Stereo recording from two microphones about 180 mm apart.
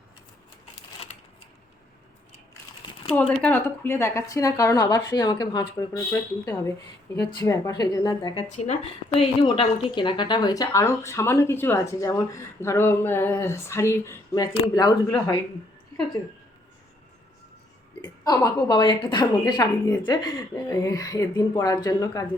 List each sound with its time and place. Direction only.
3.1 s a woman's voice: 5° left (ahead or behind); by 5.6 s 25° left (ahead or behind)
7.2 s a woman's voice: 20° left (ahead or behind)
8.5 s a woman's voice: 40° left (ahead or behind); by 15.4 s 20° left (ahead or behind)
18.0 s a woman's voice: 20° left (ahead or behind)